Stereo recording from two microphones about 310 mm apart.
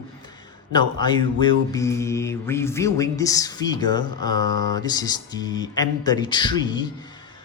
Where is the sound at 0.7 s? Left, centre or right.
Centre.